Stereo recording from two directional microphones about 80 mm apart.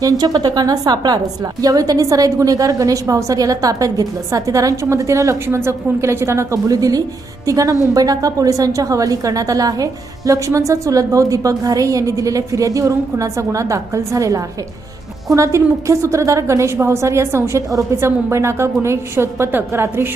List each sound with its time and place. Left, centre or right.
0.0 s a woman's voice: right